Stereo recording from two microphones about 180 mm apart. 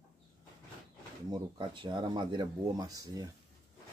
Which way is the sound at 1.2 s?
25° right (ahead or behind).